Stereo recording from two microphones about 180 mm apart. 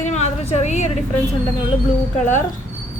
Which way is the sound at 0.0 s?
40° left (ahead or behind).